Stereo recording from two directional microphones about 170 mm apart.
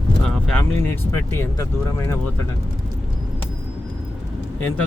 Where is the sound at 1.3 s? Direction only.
15° left (ahead or behind).